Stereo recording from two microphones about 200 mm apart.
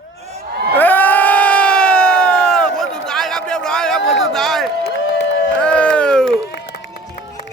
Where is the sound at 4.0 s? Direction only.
70° left (ahead or behind).